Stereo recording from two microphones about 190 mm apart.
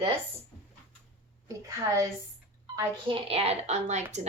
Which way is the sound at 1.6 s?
15° right (ahead or behind).